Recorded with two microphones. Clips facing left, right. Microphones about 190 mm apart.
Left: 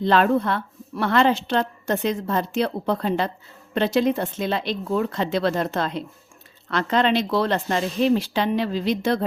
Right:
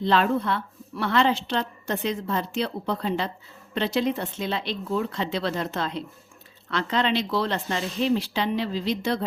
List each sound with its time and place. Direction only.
0.0 s a woman's voice: 50° left (ahead or behind)